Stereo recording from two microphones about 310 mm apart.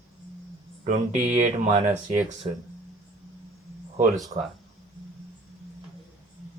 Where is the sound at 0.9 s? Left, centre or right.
Right.